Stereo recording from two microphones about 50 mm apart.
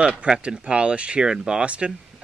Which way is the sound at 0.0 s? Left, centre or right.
Centre.